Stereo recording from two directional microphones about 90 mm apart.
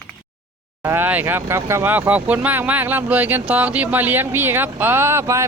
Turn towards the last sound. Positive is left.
turn(degrees=-30)  # may be behind; listen again after turning